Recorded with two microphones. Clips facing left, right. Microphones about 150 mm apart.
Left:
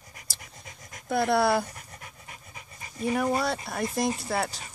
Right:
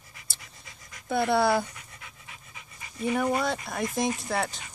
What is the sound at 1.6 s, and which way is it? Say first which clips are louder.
Dog: left 2 dB; 45° left (ahead or behind).